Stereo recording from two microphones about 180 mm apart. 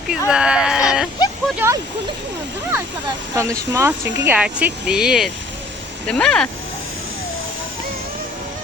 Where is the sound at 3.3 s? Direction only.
15° right (ahead or behind); by 6.5 s 5° left (ahead or behind).